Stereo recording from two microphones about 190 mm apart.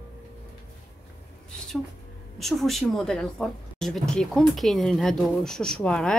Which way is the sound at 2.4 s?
Centre (ahead or behind).